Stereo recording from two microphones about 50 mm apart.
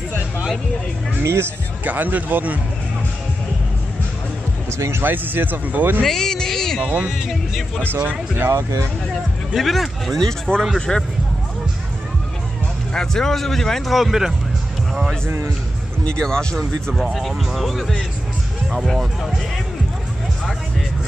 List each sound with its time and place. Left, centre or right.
1.2 s a man's voice: right
1.9 s speech: right
4.6 s speech: right
5.0 s speech: right
6.0 s a sound: centre
6.8 s speech: right
7.2 s speech: centre
7.9 s speech: right
9.6 s a man's voice: centre
12.9 s a man's voice: centre
13.9 s speech: centre
15.2 s a man's voice: right
16.1 s a man's voice: centre
16.5 s speech: centre